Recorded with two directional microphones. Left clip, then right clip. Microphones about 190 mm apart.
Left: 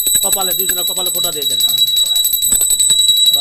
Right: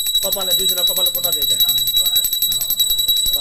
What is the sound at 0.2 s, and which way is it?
Speech, 60° left (ahead or behind).